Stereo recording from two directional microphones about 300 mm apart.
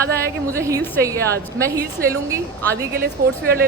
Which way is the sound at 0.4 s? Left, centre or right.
Centre.